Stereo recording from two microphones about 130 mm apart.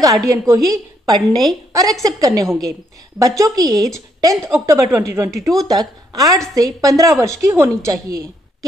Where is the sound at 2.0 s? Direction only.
25° right (ahead or behind).